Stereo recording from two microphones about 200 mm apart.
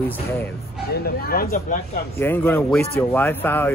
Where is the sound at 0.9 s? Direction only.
50° left (ahead or behind).